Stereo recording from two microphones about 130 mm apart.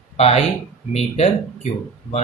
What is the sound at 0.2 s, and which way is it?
Speech, 50° left (ahead or behind).